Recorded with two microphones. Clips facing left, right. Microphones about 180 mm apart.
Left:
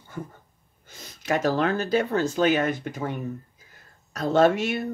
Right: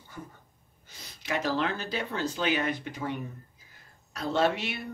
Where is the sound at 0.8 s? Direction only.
45° left (ahead or behind).